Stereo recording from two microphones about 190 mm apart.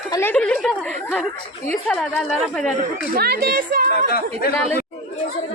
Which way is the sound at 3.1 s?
55° right (ahead or behind).